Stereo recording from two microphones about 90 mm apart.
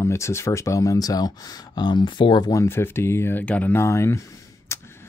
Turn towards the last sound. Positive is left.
turn(degrees=30)  # may be behind; listen again after turning